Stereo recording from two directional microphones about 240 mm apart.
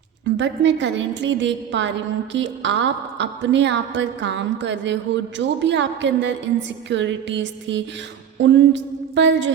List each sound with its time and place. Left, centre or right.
0.3 s a woman's voice: right